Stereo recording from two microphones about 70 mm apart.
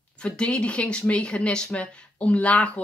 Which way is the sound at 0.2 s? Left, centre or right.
Centre.